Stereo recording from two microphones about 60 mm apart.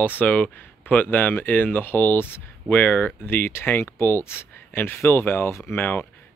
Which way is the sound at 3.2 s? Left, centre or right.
Left.